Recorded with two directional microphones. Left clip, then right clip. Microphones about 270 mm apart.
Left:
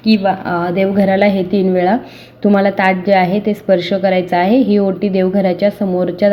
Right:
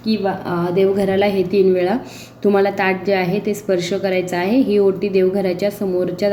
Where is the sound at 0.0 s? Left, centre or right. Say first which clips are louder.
Left 6 dB; left.